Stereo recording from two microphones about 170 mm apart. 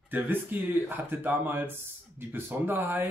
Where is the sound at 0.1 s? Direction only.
10° right (ahead or behind).